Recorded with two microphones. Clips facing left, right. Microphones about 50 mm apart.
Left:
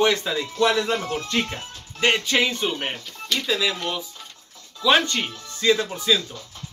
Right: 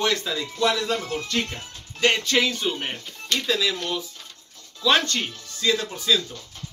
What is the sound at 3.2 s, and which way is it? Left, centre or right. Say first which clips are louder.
Speech: even; centre.